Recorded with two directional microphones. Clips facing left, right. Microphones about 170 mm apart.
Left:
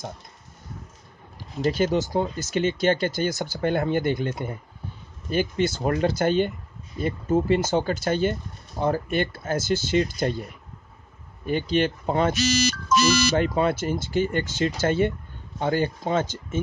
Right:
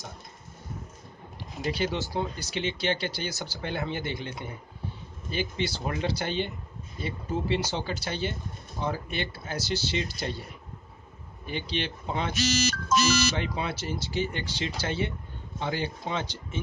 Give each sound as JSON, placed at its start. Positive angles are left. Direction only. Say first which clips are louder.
{"t": 1.6, "sound": "speech", "louder": "left 7 dB", "side_deg": 45}
{"t": 11.4, "sound": "speech", "louder": "left 10 dB", "side_deg": 45}
{"t": 13.4, "sound": "speech", "louder": "left 9 dB", "side_deg": 50}